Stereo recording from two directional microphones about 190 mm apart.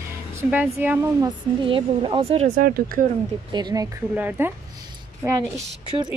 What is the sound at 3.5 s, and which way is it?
Speech, 20° right (ahead or behind).